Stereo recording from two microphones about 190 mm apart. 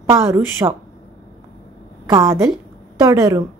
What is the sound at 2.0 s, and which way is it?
A woman's voice, 20° right (ahead or behind).